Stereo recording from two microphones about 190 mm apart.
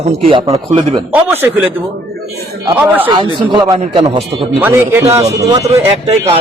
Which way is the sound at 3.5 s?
20° right (ahead or behind).